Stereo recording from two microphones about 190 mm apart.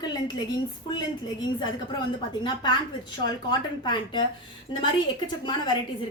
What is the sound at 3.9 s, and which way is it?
A woman's voice, 25° left (ahead or behind).